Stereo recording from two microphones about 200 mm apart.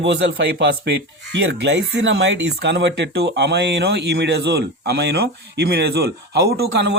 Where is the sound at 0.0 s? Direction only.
60° right (ahead or behind).